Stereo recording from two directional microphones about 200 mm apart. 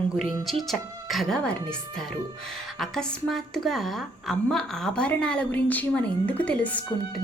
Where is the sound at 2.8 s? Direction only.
Centre (ahead or behind).